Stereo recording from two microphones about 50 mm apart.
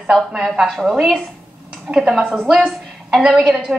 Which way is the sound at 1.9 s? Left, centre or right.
Centre.